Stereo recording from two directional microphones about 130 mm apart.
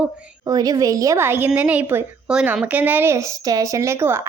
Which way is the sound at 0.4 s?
30° right (ahead or behind).